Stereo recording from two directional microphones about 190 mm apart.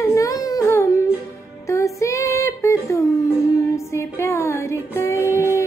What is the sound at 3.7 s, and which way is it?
Music, 15° left (ahead or behind).